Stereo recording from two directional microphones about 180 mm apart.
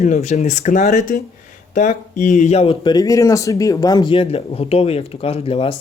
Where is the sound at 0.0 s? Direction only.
40° left (ahead or behind).